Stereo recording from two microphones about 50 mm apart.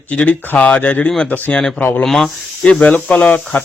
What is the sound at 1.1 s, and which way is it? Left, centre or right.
Speech, centre.